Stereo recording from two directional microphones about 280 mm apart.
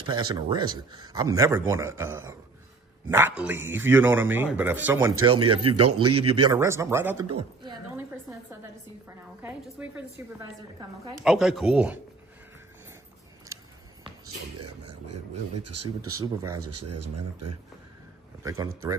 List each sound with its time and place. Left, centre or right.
0.0 s speech: centre
5.6 s speech: right
6.2 s a woman's voice: centre
11.2 s a woman's voice: centre
15.5 s speech: right
16.2 s speech: centre
16.6 s speech: right
18.4 s speech: centre